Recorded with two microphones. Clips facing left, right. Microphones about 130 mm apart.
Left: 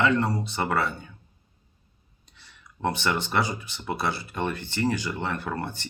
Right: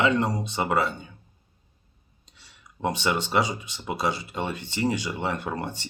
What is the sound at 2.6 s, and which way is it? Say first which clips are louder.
Speech: even; 20° right (ahead or behind).